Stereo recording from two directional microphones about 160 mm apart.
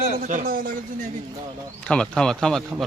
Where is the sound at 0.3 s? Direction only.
60° right (ahead or behind).